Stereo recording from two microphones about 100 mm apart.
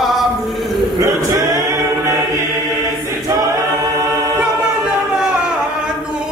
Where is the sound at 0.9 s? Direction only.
35° right (ahead or behind).